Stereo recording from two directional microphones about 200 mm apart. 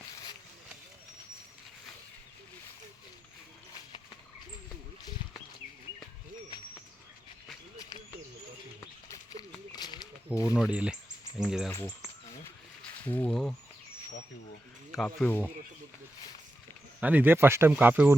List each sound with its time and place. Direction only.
9.7 s a sound: 20° left (ahead or behind)
10.5 s speech: 5° right (ahead or behind)
11.7 s speech: 15° left (ahead or behind)
14.9 s speech: 5° left (ahead or behind)
17.0 s speech: 10° right (ahead or behind)